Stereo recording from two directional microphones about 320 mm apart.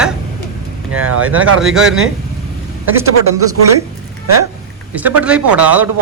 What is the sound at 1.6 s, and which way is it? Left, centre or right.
Speech, centre.